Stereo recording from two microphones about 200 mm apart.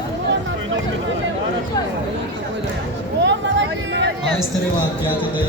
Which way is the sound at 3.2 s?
65° right (ahead or behind).